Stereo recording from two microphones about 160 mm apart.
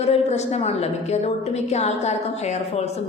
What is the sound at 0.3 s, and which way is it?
A woman's voice, 45° left (ahead or behind).